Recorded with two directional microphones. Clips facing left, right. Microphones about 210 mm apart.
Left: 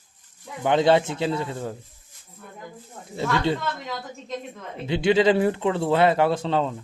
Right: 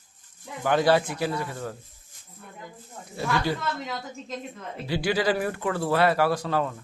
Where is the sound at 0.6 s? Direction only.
20° left (ahead or behind).